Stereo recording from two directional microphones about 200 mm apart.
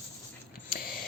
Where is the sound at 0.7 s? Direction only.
45° left (ahead or behind).